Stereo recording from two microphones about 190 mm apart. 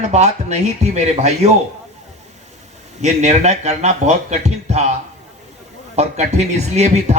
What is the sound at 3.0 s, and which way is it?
Speech, 35° right (ahead or behind).